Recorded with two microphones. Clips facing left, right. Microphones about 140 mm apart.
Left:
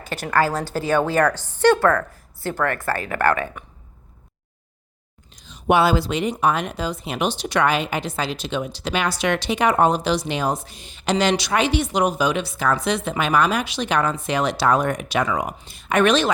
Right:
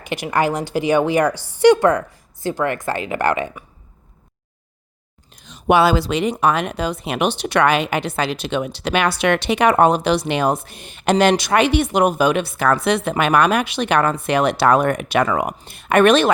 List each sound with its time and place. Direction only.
0.0 s a woman's voice: 15° right (ahead or behind)
5.4 s speech: 80° right; by 16.3 s 55° right (ahead or behind)